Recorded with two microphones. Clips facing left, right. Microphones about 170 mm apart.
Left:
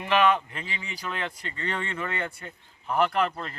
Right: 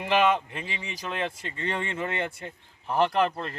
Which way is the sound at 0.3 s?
20° right (ahead or behind).